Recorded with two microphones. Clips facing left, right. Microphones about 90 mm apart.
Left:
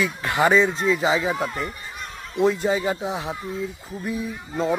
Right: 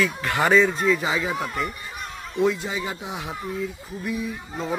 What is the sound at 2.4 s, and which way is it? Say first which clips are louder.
Speech: left 4 dB; 40° left (ahead or behind).